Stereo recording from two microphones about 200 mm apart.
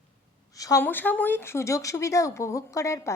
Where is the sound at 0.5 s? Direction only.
15° left (ahead or behind).